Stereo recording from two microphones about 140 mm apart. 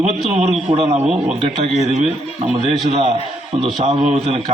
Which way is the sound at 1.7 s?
50° left (ahead or behind).